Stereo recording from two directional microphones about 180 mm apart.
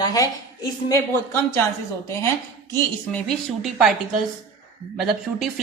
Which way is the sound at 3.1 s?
5° left (ahead or behind).